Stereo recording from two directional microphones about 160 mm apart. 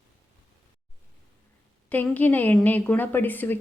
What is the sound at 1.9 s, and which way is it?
Speech, 10° left (ahead or behind).